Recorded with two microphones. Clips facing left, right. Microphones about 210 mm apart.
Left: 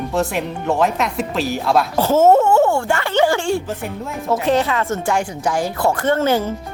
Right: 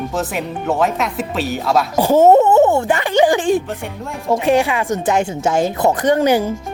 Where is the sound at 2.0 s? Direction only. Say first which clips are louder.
Right 3 dB; 15° right (ahead or behind).